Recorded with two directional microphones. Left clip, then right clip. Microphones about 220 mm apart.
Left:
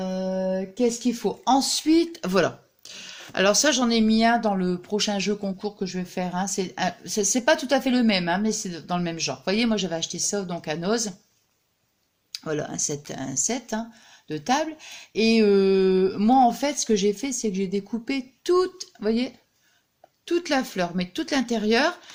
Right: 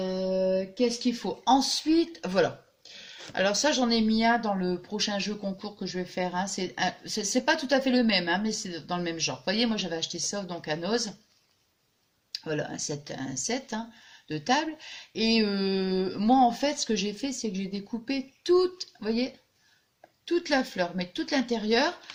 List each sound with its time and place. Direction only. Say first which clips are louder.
0.8 s speech: left 4 dB; 40° left (ahead or behind)
12.3 s speech: left 3 dB; 45° left (ahead or behind)